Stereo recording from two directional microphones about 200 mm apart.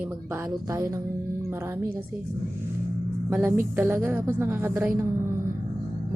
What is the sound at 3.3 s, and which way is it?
A woman's voice, 10° right (ahead or behind).